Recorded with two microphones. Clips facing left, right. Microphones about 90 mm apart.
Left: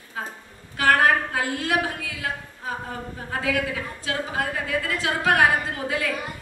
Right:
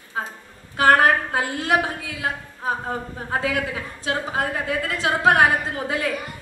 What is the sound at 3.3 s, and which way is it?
A woman's voice, 30° right (ahead or behind).